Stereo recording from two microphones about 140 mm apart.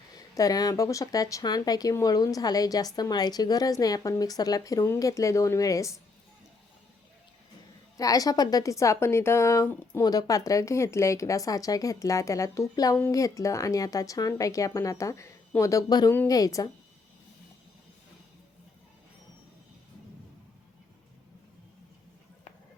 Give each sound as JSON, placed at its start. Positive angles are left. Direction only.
{"t": 0.1, "sound": "speech", "side_deg": 25}
{"t": 7.9, "sound": "speech", "side_deg": 25}